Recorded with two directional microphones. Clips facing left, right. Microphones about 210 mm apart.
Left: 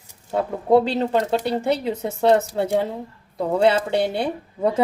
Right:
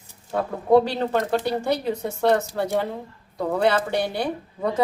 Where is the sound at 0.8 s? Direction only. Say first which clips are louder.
Left 3 dB; 20° left (ahead or behind).